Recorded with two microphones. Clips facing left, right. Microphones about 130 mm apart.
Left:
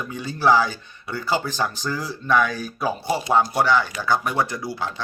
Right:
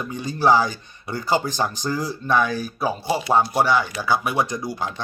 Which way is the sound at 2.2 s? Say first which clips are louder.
Left 1 dB; 35° right (ahead or behind).